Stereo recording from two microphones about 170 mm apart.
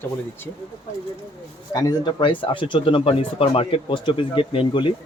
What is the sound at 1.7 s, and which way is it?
Speech, 25° left (ahead or behind).